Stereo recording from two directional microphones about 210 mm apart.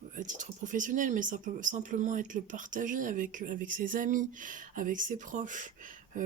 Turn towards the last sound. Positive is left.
turn(degrees=-40)  # may be behind; listen again after turning